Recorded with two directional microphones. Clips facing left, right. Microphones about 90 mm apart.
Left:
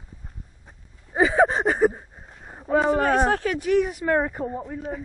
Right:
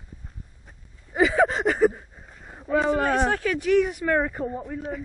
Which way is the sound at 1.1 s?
25° left (ahead or behind).